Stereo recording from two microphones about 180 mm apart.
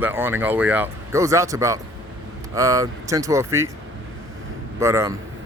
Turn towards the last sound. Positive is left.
turn(degrees=-15)  # may be behind; listen again after turning